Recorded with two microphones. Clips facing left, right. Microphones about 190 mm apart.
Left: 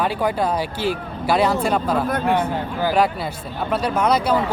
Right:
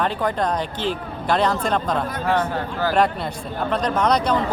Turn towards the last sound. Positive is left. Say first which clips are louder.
# left 1 dB
turn(degrees=5)  # may be behind; listen again after turning